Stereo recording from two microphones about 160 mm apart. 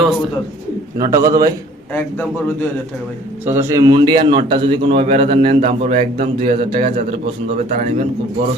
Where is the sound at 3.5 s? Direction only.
15° right (ahead or behind); by 8.1 s 50° right (ahead or behind).